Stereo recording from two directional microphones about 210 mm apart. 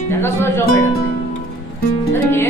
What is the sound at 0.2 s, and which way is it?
Music, 10° left (ahead or behind).